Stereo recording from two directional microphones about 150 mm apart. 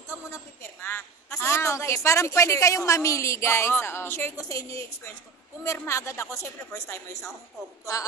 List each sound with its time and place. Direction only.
0.8 s speech: 15° left (ahead or behind)